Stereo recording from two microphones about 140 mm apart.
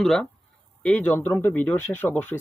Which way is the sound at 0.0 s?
5° left (ahead or behind).